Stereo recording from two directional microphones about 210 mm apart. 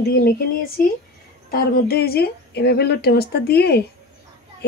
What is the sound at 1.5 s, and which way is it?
A woman's voice, 45° left (ahead or behind).